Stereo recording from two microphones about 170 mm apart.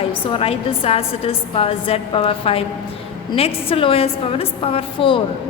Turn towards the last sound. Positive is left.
turn(degrees=30)  # may be behind; listen again after turning